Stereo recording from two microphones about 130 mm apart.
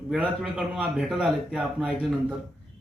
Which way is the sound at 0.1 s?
5° right (ahead or behind).